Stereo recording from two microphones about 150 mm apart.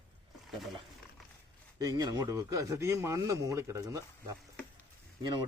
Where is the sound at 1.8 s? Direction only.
25° right (ahead or behind).